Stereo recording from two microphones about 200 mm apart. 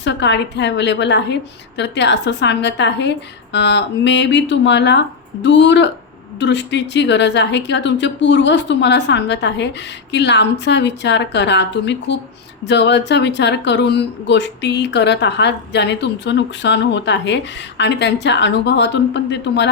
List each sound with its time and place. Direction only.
0.0 s speech: 60° left (ahead or behind)